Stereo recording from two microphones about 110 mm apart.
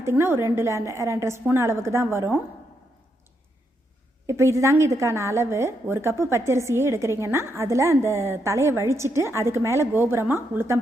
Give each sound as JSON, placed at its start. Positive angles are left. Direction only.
{"t": 0.0, "sound": "a woman's voice", "side_deg": -20}
{"t": 4.3, "sound": "a woman's voice", "side_deg": -25}